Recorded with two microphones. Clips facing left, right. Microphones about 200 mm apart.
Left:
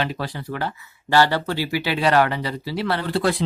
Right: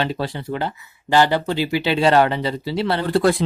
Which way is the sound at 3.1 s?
50° right (ahead or behind).